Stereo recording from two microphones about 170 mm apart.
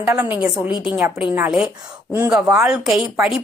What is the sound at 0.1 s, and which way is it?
Speech, 15° right (ahead or behind).